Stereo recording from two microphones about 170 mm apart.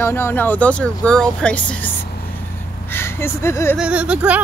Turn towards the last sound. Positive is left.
turn(degrees=-10)  # may be behind; listen again after turning